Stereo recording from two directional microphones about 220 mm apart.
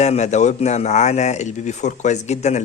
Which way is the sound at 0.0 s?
30° left (ahead or behind).